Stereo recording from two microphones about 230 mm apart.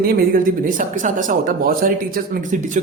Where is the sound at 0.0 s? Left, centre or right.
Right.